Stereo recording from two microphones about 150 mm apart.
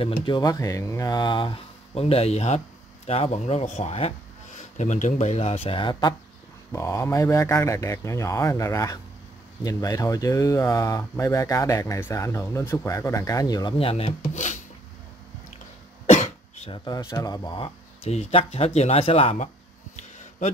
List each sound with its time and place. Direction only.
0.0 s speech: 35° left (ahead or behind)
4.7 s speech: 55° left (ahead or behind); by 6.1 s 30° left (ahead or behind)
6.7 s speech: 20° left (ahead or behind)
13.7 s speech: 40° left (ahead or behind)
14.3 s a sound: 55° left (ahead or behind)
16.1 s cough: 50° left (ahead or behind)
16.7 s speech: 25° left (ahead or behind)
18.0 s speech: 45° left (ahead or behind)